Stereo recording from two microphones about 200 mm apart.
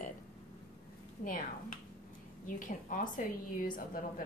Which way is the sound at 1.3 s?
40° left (ahead or behind).